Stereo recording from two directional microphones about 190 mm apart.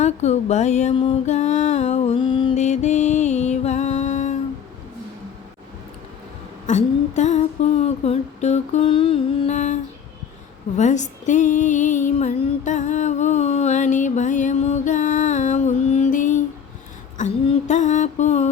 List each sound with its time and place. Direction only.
0.0 s female singing: 35° left (ahead or behind)
2.6 s music: 35° left (ahead or behind)
6.7 s music: 40° left (ahead or behind)
10.8 s female singing: 40° left (ahead or behind)
17.2 s a sound: 40° left (ahead or behind)